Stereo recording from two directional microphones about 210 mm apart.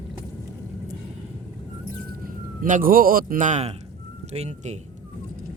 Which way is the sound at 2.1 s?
40° right (ahead or behind).